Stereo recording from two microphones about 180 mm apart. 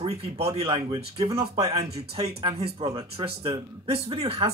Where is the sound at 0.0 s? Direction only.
35° right (ahead or behind).